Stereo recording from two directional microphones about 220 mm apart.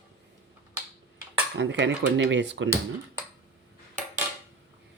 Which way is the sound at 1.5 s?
55° right (ahead or behind).